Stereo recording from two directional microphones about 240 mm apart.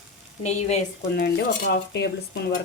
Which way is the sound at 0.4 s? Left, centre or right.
Left.